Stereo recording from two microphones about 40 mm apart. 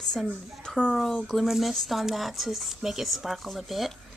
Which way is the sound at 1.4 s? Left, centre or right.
Centre.